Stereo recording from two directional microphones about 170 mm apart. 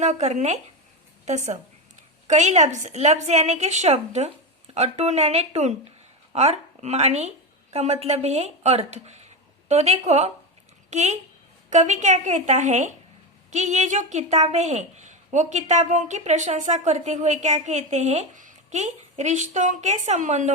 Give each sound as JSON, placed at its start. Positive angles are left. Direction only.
{"t": 0.0, "sound": "a woman's voice", "side_deg": -40}